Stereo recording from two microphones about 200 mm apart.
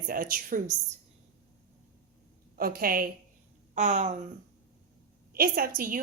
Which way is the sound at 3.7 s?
35° right (ahead or behind).